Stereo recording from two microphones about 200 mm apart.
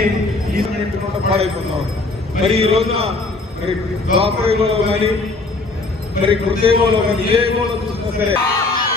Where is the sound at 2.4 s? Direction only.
30° right (ahead or behind).